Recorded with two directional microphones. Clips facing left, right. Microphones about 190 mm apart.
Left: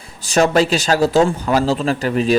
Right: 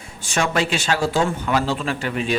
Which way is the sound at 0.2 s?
35° left (ahead or behind).